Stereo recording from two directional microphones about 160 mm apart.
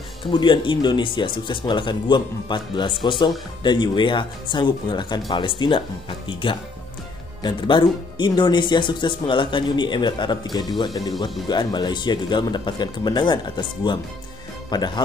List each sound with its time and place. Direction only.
0.2 s speech: 30° left (ahead or behind)